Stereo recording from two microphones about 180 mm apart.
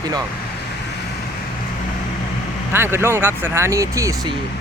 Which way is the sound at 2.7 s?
15° right (ahead or behind).